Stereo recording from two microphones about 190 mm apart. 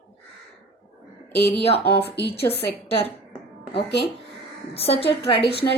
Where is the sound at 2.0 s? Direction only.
60° left (ahead or behind).